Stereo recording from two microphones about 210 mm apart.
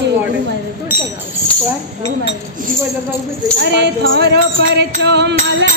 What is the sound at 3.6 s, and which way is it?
Speech, 55° right (ahead or behind).